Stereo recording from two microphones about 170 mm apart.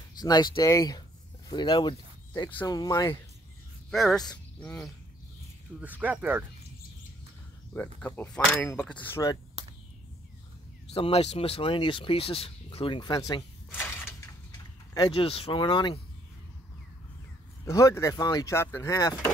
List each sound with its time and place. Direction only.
0.2 s speech: 25° left (ahead or behind)
3.9 s speech: centre (ahead or behind)
5.8 s speech: 10° right (ahead or behind)
8.0 s speech: 10° left (ahead or behind)
10.9 s speech: 35° left (ahead or behind)
13.7 s a sound: 10° left (ahead or behind)
15.0 s speech: 30° left (ahead or behind)
17.6 s speech: 15° left (ahead or behind)